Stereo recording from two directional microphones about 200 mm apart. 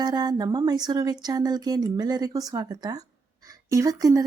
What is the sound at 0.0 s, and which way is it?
Speech, 20° right (ahead or behind).